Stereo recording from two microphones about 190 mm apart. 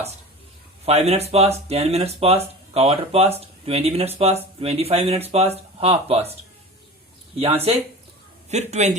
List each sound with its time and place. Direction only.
0.9 s speech: 35° right (ahead or behind)
7.3 s speech: 30° right (ahead or behind)